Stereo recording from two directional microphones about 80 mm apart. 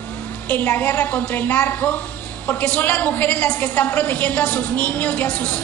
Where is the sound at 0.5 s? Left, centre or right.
Left.